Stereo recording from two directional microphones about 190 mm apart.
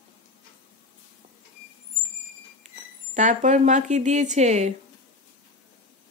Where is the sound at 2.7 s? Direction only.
40° right (ahead or behind).